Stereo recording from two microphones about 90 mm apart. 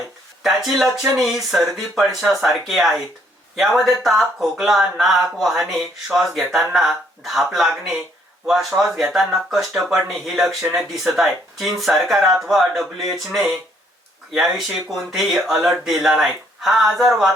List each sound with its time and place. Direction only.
0.4 s speech: 5° right (ahead or behind)
8.7 s speech: 20° right (ahead or behind)
9.1 s speech: centre (ahead or behind)
14.9 s speech: centre (ahead or behind)